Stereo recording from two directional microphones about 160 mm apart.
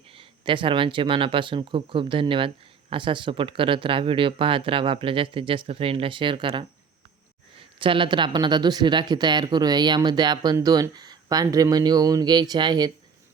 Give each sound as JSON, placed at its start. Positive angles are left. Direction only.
{"t": 0.1, "sound": "speech", "side_deg": -30}